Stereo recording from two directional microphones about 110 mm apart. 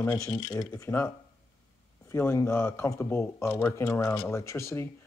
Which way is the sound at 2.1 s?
25° left (ahead or behind).